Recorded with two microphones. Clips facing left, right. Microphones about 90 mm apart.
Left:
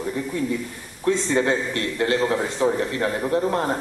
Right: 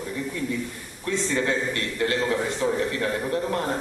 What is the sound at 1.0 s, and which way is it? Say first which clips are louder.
A man's voice: left 5 dB; 35° left (ahead or behind).